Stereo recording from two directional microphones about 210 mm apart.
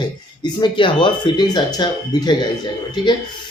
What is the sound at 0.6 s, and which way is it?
A man's voice, 25° left (ahead or behind).